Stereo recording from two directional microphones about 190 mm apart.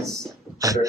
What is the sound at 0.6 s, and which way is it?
Speech, 20° right (ahead or behind).